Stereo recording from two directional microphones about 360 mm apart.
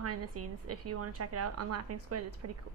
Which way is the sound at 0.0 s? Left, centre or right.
Right.